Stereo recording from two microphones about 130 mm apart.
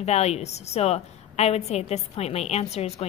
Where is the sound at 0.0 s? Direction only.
55° left (ahead or behind).